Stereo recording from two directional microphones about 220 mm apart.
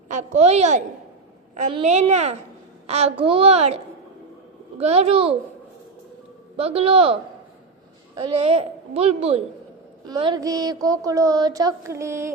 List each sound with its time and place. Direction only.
0.1 s a child's voice: 30° right (ahead or behind)
4.8 s a woman's voice: 30° right (ahead or behind)
6.6 s a woman's voice: 25° right (ahead or behind)
10.1 s a sound: 20° right (ahead or behind)